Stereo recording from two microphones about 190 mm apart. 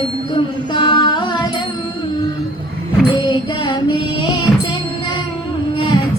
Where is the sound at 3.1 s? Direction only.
25° left (ahead or behind).